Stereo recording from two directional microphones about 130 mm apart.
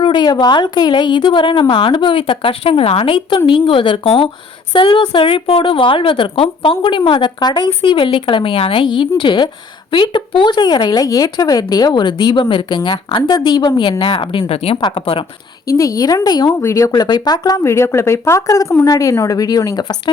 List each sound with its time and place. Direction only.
0.0 s a woman's voice: 35° left (ahead or behind)
14.8 s a woman's voice: 35° left (ahead or behind)
15.6 s speech: 25° left (ahead or behind)
16.6 s speech: 20° left (ahead or behind)
16.9 s speech: 35° left (ahead or behind)